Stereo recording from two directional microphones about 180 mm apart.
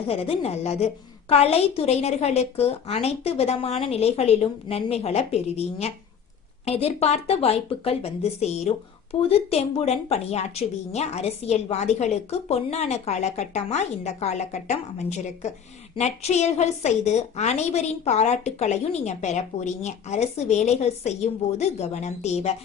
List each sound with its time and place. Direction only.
0.1 s a woman's voice: 35° left (ahead or behind)